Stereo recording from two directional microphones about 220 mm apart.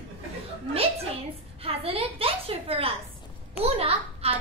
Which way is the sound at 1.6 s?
25° right (ahead or behind).